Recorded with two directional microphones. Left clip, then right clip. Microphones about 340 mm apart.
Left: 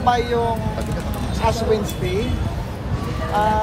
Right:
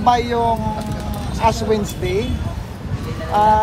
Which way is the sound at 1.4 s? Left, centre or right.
Right.